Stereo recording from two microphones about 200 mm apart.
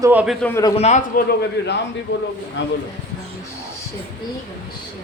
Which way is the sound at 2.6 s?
65° left (ahead or behind).